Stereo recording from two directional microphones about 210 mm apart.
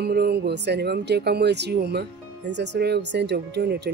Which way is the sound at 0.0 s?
50° right (ahead or behind).